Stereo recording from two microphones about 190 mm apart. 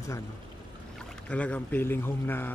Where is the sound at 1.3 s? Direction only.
5° left (ahead or behind).